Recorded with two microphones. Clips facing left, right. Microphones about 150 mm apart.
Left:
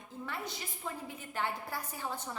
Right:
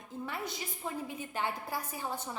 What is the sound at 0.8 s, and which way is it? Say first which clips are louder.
Speech: right 3 dB; 15° right (ahead or behind).